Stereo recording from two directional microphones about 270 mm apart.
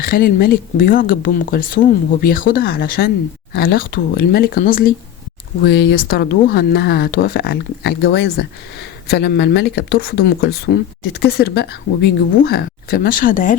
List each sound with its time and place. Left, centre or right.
0.0 s speech: left